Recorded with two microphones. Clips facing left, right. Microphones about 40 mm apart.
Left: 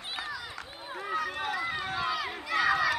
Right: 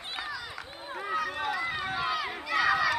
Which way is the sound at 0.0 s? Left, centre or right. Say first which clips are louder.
Even; centre.